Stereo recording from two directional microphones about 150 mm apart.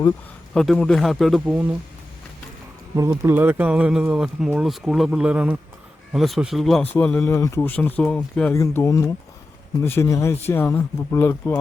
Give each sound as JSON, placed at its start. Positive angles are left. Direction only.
{"t": 0.5, "sound": "speech", "side_deg": 5}
{"t": 2.9, "sound": "speech", "side_deg": -20}
{"t": 7.3, "sound": "speech", "side_deg": 20}